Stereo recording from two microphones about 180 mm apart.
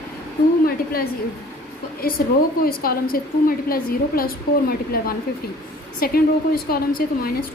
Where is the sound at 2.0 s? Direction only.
55° left (ahead or behind).